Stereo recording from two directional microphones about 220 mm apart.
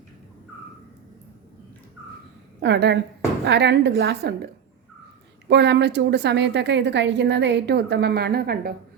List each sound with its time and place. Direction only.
2.6 s a woman's voice: 50° right (ahead or behind)
5.5 s a woman's voice: 50° right (ahead or behind)